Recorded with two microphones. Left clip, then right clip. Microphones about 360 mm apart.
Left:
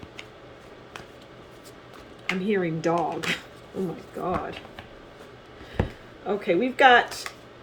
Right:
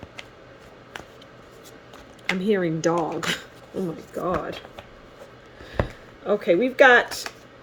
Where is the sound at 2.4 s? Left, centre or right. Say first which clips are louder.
Right 3 dB; right.